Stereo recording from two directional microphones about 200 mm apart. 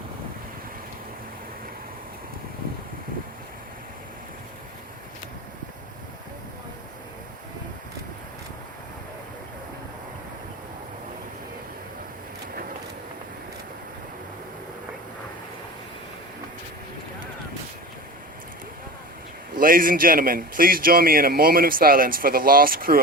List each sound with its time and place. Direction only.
19.5 s a man's voice: 45° right (ahead or behind)